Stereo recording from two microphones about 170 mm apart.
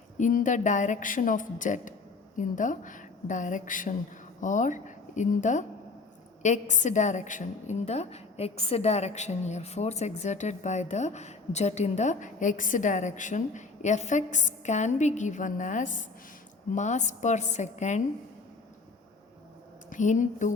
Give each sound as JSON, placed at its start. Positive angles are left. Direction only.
{"t": 0.2, "sound": "a woman's voice", "side_deg": 50}
{"t": 19.9, "sound": "a woman's voice", "side_deg": 50}